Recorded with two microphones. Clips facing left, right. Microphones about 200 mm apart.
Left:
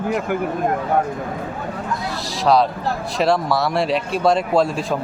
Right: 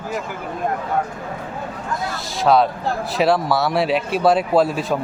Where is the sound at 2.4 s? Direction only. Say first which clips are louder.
Right 1 dB; centre (ahead or behind).